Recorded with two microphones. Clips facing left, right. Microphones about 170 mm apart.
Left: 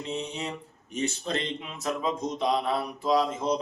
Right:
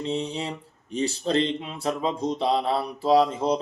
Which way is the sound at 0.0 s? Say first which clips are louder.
Right 5 dB; 30° right (ahead or behind).